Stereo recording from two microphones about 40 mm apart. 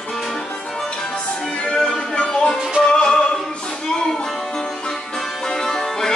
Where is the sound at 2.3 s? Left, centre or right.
Centre.